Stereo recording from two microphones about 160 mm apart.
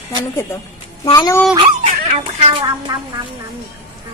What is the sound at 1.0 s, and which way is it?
Speech, 30° left (ahead or behind).